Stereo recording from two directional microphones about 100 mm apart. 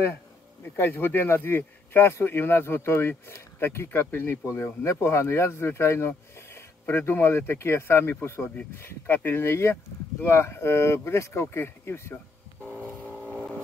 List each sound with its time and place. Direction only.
0.7 s speech: 20° left (ahead or behind)
13.1 s vehicle: 15° right (ahead or behind)